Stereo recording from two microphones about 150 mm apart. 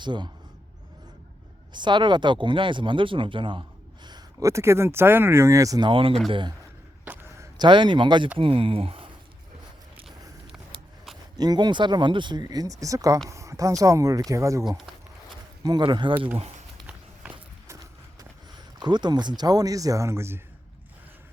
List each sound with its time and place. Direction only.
0.0 s speech: 30° right (ahead or behind)
1.7 s speech: 30° right (ahead or behind)
7.0 s a sound: 10° right (ahead or behind)
7.6 s speech: 30° right (ahead or behind)
11.3 s speech: 25° right (ahead or behind)
15.6 s speech: 30° right (ahead or behind)
16.8 s run: 10° right (ahead or behind)
18.8 s speech: 30° right (ahead or behind)